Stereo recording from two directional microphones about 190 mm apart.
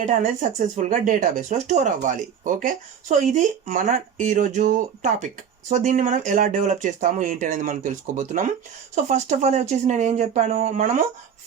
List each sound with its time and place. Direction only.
0.0 s speech: 40° right (ahead or behind)